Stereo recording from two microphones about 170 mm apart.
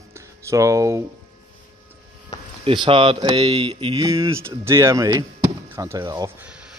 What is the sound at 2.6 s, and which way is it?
Speech, 30° right (ahead or behind).